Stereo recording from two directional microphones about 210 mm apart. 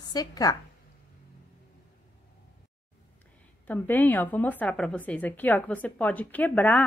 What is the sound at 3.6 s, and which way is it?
A woman's voice, 10° left (ahead or behind).